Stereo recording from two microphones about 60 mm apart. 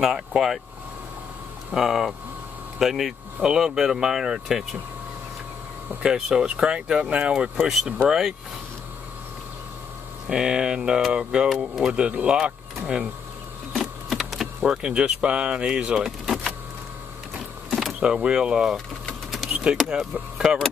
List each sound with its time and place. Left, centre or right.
0.0 s speech: centre
1.7 s speech: centre
6.0 s speech: centre
7.5 s speech: centre
10.2 s speech: centre
13.7 s a sound: centre
14.6 s speech: centre
16.0 s power windows: centre
17.6 s a sound: centre
18.0 s speech: centre
19.4 s power windows: centre